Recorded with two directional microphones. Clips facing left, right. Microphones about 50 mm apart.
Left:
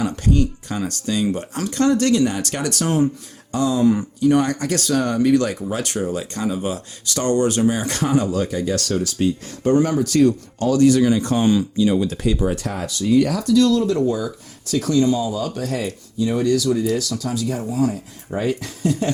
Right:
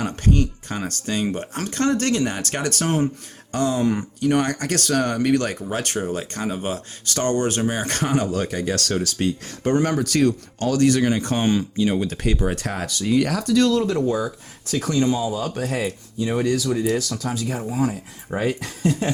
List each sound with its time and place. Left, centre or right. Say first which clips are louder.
0.0 s speech: left 2 dB; right
3.5 s speech: left 3 dB; right
9.6 s speech: left 3 dB; right
11.0 s speech: left 3 dB; right
12.8 s speech: left 4 dB; right
13.7 s speech: left 2 dB; right
14.7 s speech: left 3 dB; right